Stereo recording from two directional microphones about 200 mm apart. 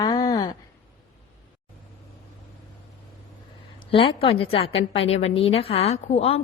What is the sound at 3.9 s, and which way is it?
A woman's voice, 25° left (ahead or behind).